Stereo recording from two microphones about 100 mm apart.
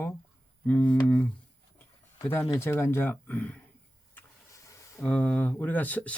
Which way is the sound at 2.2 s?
25° left (ahead or behind).